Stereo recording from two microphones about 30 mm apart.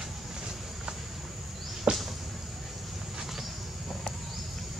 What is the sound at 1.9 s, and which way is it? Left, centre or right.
Insect, right.